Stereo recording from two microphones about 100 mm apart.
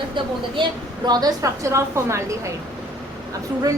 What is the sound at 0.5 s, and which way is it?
A woman's voice, 50° right (ahead or behind).